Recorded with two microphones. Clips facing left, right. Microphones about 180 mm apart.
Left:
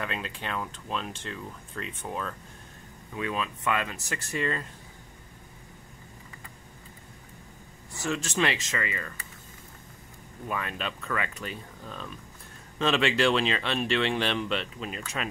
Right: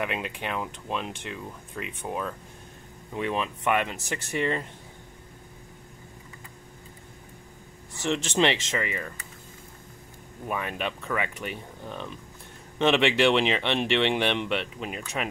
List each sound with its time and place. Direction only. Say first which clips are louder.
0.0 s speech: right 4 dB; 15° right (ahead or behind)
8.0 s speech: right 4 dB; 25° right (ahead or behind)
10.5 s speech: right 3 dB; 15° right (ahead or behind)